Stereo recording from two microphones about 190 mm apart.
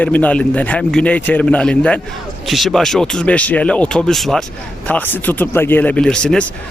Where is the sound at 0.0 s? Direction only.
10° left (ahead or behind).